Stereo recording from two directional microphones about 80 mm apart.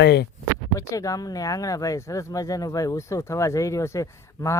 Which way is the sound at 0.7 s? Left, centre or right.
Left.